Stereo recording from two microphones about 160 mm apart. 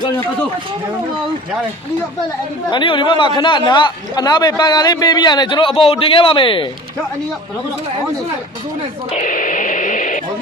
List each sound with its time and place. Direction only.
2.6 s speech: 30° left (ahead or behind)
9.1 s radio: 60° left (ahead or behind)